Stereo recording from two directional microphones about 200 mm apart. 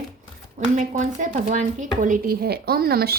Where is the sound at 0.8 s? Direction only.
40° right (ahead or behind).